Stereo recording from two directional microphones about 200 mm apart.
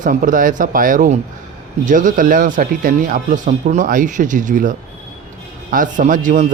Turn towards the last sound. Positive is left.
turn(degrees=-40)  # may be behind; listen again after turning